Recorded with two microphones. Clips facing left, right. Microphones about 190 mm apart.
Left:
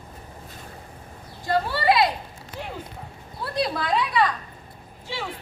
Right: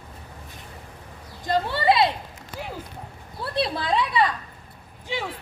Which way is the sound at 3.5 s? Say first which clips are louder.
Even; 25° right (ahead or behind).